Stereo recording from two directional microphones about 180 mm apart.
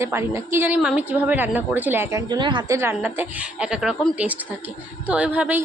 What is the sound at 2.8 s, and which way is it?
A woman's voice, 10° right (ahead or behind).